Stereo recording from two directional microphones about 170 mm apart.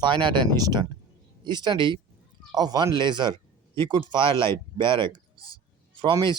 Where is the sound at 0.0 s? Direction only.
30° right (ahead or behind).